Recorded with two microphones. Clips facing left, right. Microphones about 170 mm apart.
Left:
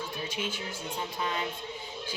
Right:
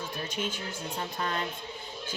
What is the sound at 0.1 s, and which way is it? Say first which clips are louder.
Music: even; 10° left (ahead or behind).